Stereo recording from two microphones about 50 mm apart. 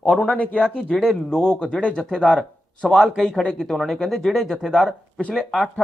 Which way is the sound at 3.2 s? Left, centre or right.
Centre.